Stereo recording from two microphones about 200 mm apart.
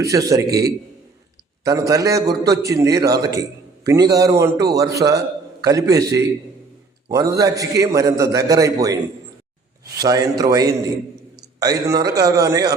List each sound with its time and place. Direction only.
0.0 s a man's voice: 15° right (ahead or behind)
1.6 s a man's voice: 15° right (ahead or behind)
10.0 s a man's voice: 20° right (ahead or behind)